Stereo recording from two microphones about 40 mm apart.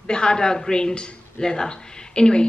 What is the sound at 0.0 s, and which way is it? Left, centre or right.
A woman's voice, left.